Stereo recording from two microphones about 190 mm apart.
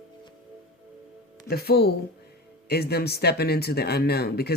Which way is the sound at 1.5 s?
55° left (ahead or behind).